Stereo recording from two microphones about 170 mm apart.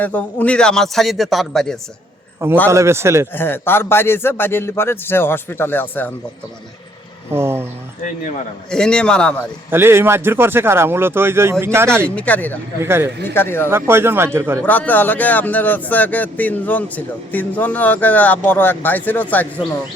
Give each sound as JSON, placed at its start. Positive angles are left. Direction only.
{"t": 0.0, "sound": "a man's voice", "side_deg": 10}
{"t": 2.6, "sound": "speech", "side_deg": -15}
{"t": 3.3, "sound": "speech", "side_deg": 10}
{"t": 7.3, "sound": "speech", "side_deg": -15}
{"t": 8.7, "sound": "a man's voice", "side_deg": 5}
{"t": 9.6, "sound": "speech", "side_deg": -15}
{"t": 11.9, "sound": "speech", "side_deg": 5}
{"t": 12.8, "sound": "speech", "side_deg": -15}
{"t": 13.2, "sound": "speech", "side_deg": 10}
{"t": 13.7, "sound": "speech", "side_deg": -15}
{"t": 14.6, "sound": "speech", "side_deg": 10}